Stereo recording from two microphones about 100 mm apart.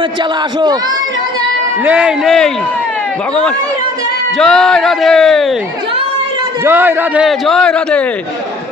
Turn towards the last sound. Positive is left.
turn(degrees=10)  # may be behind; listen again after turning